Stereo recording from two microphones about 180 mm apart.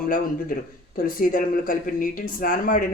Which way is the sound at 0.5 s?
50° left (ahead or behind).